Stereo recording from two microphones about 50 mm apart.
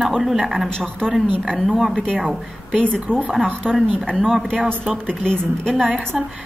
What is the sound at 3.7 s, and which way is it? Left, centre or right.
Speech, right.